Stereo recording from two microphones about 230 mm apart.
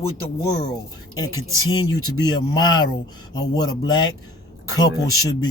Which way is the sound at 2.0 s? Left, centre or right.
Centre.